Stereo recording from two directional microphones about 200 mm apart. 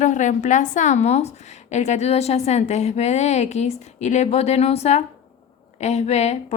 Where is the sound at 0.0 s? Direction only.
40° left (ahead or behind).